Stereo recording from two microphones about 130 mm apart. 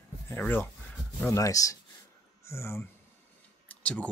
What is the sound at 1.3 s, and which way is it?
Speech, 25° left (ahead or behind).